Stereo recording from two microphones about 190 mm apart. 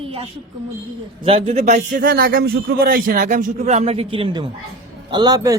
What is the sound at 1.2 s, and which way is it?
A man's voice, 30° right (ahead or behind).